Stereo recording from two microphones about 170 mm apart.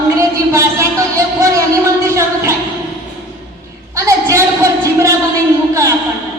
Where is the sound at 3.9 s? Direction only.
20° right (ahead or behind).